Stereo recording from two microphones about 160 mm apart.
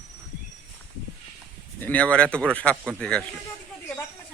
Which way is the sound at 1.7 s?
10° left (ahead or behind).